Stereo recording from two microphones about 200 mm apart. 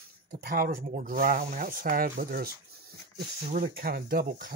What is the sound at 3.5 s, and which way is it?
Speech, 45° right (ahead or behind).